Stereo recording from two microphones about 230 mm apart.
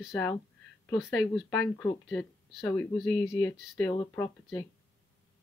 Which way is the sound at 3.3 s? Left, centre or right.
Centre.